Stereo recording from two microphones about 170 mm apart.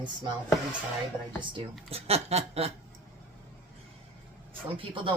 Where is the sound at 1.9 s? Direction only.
40° right (ahead or behind).